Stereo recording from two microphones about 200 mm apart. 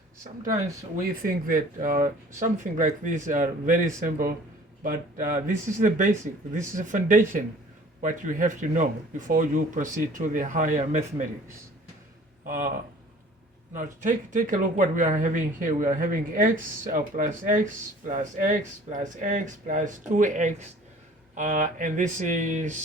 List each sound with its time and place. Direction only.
0.9 s speech: 45° right (ahead or behind)
12.5 s speech: 40° right (ahead or behind)
13.7 s speech: 40° right (ahead or behind)